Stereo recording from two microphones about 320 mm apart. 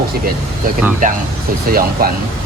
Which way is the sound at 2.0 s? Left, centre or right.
Right.